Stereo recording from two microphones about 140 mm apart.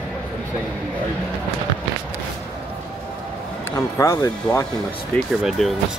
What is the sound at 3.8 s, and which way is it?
Speech, 20° left (ahead or behind).